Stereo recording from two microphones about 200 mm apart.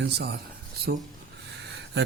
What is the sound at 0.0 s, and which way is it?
Speech, 55° right (ahead or behind).